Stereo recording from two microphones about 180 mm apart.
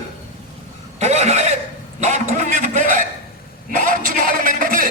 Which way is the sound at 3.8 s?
45° right (ahead or behind).